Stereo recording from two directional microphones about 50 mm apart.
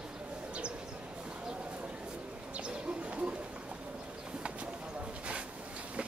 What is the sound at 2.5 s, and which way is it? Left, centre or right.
Bird, right.